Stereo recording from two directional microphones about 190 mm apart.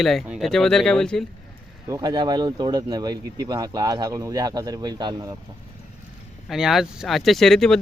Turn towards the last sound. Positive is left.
turn(degrees=0)  # may be behind; listen again after turning